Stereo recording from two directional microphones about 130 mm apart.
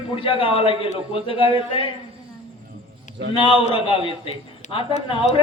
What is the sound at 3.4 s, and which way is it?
A man's voice, 40° left (ahead or behind).